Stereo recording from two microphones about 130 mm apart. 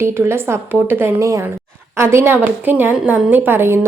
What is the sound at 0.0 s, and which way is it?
A woman's voice, 20° right (ahead or behind).